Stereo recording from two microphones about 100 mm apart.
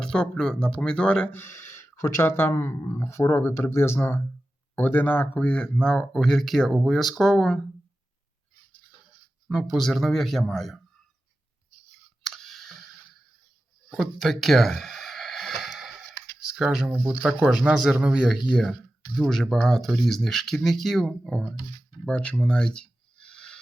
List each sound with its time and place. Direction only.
0.0 s speech: 10° left (ahead or behind)
1.4 s speech: 25° left (ahead or behind); by 7.6 s 5° left (ahead or behind)
9.5 s speech: 5° right (ahead or behind)
12.3 s clicking: 5° left (ahead or behind)
13.9 s a sound: centre (ahead or behind)
16.5 s a man's voice: 5° right (ahead or behind)
22.0 s a sound: 10° left (ahead or behind)